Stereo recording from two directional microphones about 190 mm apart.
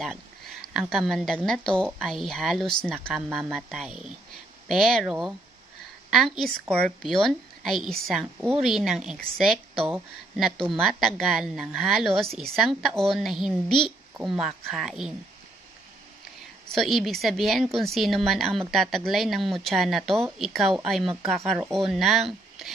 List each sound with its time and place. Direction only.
0.0 s a woman's voice: centre (ahead or behind)
6.0 s a sound: centre (ahead or behind)
6.7 s a woman's voice: 5° left (ahead or behind)
16.7 s a woman's voice: centre (ahead or behind)